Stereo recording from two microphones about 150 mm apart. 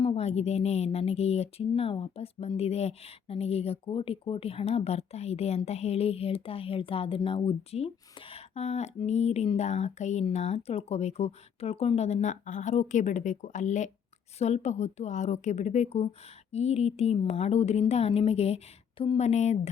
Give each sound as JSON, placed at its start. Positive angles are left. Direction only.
{"t": 0.0, "sound": "speech", "side_deg": 40}